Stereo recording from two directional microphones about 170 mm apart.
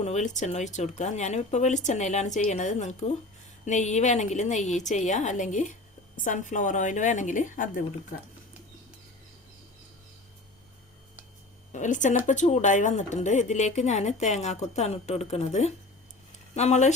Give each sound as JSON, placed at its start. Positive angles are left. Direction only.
{"t": 0.0, "sound": "speech", "side_deg": 45}
{"t": 11.7, "sound": "speech", "side_deg": 45}